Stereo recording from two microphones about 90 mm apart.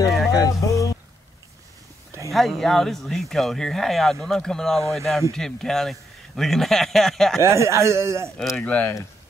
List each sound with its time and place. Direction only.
0.3 s a sound: 40° left (ahead or behind)
2.3 s speech: 5° left (ahead or behind)
7.3 s a man's voice: 35° right (ahead or behind)
8.4 s speech: 10° left (ahead or behind)